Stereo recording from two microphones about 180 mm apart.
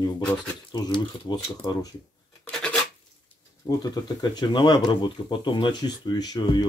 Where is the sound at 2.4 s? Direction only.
5° left (ahead or behind).